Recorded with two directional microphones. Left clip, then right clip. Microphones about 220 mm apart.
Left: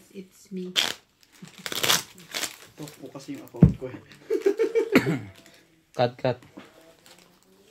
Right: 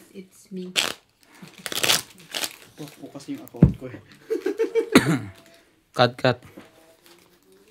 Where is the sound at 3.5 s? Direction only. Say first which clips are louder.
Right 1 dB; 55° right (ahead or behind).